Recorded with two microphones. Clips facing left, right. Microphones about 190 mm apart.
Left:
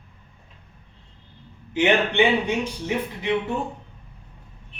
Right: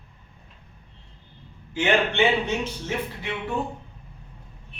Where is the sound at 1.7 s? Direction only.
15° left (ahead or behind).